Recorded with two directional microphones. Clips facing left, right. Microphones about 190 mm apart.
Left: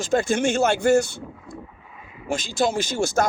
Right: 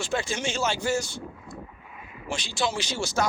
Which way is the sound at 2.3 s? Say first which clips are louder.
Left 6 dB; 50° left (ahead or behind).